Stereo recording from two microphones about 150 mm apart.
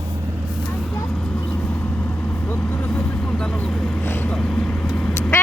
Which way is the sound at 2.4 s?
15° left (ahead or behind).